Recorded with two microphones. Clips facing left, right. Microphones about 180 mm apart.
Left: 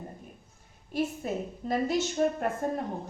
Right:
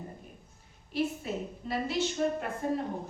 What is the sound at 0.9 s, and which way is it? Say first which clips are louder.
A woman's voice: left 1 dB; 45° left (ahead or behind).